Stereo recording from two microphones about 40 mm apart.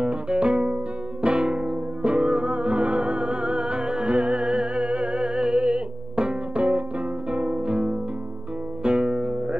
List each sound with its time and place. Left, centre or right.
0.0 s music: right
2.5 s music: right